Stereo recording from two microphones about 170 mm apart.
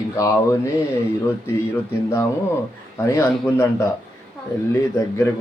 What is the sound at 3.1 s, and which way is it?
Speech, 15° left (ahead or behind).